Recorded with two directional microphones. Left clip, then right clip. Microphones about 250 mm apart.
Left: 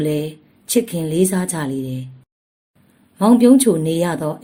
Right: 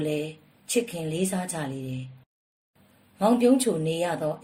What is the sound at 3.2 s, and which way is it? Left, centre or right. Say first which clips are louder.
Speech: left 8 dB; left.